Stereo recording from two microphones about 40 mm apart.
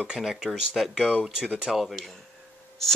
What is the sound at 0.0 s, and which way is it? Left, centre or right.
Speech, centre.